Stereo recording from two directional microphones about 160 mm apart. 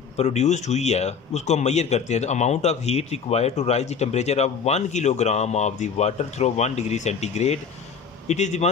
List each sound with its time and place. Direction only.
0.2 s a man's voice: 45° left (ahead or behind)